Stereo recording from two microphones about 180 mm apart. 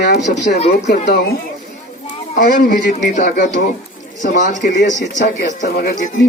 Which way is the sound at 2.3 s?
45° left (ahead or behind).